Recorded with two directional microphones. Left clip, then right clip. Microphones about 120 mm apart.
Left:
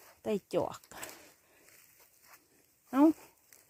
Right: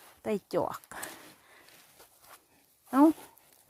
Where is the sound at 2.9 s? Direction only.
Centre (ahead or behind).